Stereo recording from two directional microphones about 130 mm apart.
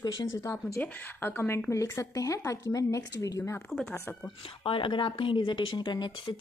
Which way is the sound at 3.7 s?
Centre (ahead or behind).